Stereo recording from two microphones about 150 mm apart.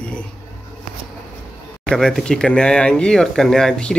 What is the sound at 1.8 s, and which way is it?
Speech, centre (ahead or behind).